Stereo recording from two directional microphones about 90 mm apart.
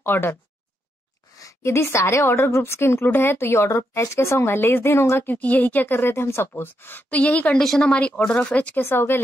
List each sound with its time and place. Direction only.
0.0 s a woman's voice: 25° left (ahead or behind)
1.3 s a woman's voice: 35° left (ahead or behind); by 8.8 s 15° left (ahead or behind)
8.8 s a woman's voice: 25° left (ahead or behind)